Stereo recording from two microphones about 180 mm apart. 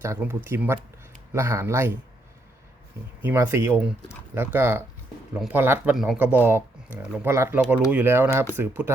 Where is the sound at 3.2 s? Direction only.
15° right (ahead or behind).